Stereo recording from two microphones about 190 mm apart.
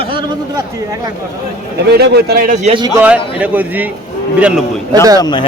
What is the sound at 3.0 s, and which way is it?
A man's voice, 5° right (ahead or behind).